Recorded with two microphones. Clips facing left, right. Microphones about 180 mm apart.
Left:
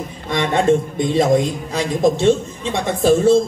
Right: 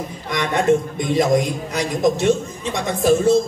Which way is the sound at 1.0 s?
25° left (ahead or behind).